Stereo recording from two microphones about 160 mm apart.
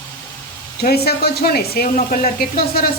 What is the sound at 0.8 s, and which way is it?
Speech, 75° left (ahead or behind).